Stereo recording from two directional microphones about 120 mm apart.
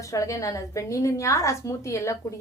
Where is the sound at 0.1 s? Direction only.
25° left (ahead or behind).